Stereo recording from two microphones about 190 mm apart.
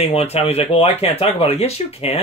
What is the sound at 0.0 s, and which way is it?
Speech, 30° left (ahead or behind).